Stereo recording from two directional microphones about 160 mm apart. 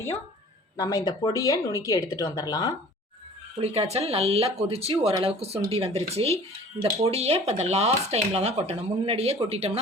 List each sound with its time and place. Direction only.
0.8 s speech: 25° left (ahead or behind)
3.6 s speech: 40° right (ahead or behind)